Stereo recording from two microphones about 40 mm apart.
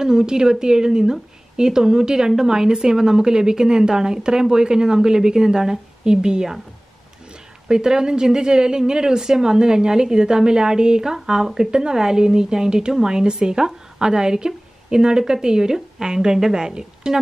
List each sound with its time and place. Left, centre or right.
0.0 s speech: centre
7.6 s speech: centre